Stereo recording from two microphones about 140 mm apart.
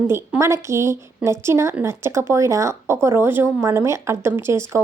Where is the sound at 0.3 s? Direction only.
20° right (ahead or behind).